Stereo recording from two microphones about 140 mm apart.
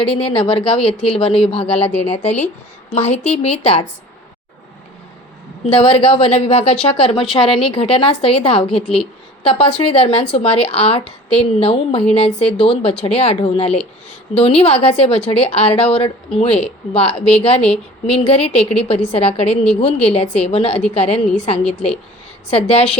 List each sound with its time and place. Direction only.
0.2 s speech: 40° left (ahead or behind)
1.6 s speech: 10° left (ahead or behind)
2.0 s speech: 50° left (ahead or behind)
5.6 s speech: 45° left (ahead or behind)